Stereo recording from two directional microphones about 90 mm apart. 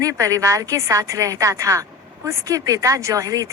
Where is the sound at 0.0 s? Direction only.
40° right (ahead or behind).